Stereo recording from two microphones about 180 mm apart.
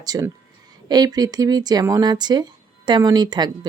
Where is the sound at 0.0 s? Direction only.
20° right (ahead or behind).